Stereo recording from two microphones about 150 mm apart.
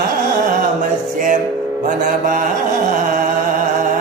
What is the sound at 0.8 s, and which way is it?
Music, 60° right (ahead or behind).